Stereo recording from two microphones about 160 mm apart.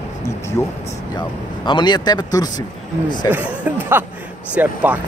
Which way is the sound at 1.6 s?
30° left (ahead or behind).